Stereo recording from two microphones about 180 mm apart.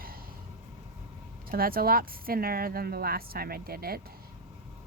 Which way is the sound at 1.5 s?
55° right (ahead or behind).